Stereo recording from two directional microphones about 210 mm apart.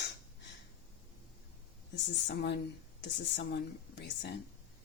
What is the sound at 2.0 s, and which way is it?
A woman's voice, 55° left (ahead or behind).